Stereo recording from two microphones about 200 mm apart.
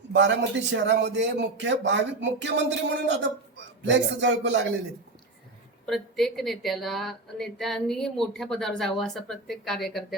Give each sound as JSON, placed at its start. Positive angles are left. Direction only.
{"t": 0.1, "sound": "a man's voice", "side_deg": -60}
{"t": 5.8, "sound": "speech", "side_deg": 0}